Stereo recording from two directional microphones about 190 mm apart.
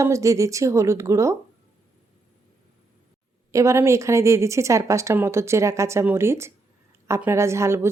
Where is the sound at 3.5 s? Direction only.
15° right (ahead or behind).